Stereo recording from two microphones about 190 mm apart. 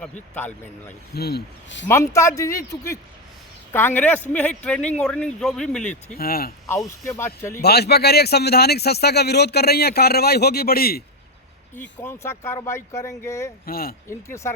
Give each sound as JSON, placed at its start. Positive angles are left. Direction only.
{"t": 0.3, "sound": "speech", "side_deg": 10}
{"t": 1.1, "sound": "speech", "side_deg": 55}
{"t": 1.9, "sound": "speech", "side_deg": 15}
{"t": 6.1, "sound": "speech", "side_deg": 50}
{"t": 6.7, "sound": "speech", "side_deg": 15}
{"t": 7.5, "sound": "speech", "side_deg": 55}
{"t": 11.7, "sound": "speech", "side_deg": 10}
{"t": 13.7, "sound": "speech", "side_deg": 50}
{"t": 14.1, "sound": "speech", "side_deg": 15}